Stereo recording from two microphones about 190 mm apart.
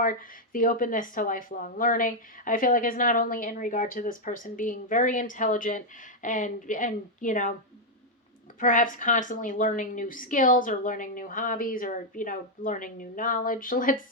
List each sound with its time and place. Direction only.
0.0 s speech: 45° left (ahead or behind)
8.6 s speech: 45° left (ahead or behind)